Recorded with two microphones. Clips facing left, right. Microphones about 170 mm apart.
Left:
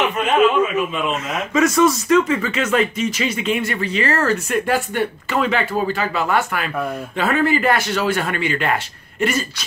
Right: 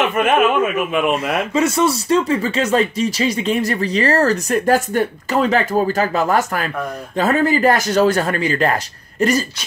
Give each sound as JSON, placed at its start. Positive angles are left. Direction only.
{"t": 0.2, "sound": "a man's voice", "side_deg": -55}
{"t": 1.5, "sound": "speech", "side_deg": -30}